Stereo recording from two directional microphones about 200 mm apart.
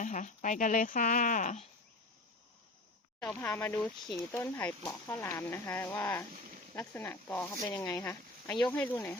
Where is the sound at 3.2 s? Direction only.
5° left (ahead or behind).